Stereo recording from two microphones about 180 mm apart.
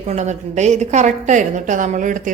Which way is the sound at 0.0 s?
35° right (ahead or behind).